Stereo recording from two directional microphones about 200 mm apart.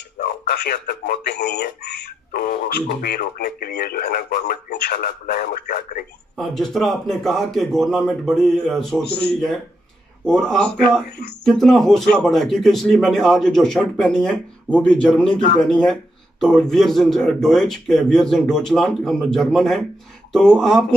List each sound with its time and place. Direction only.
0.2 s speech: 50° left (ahead or behind)
6.3 s speech: centre (ahead or behind)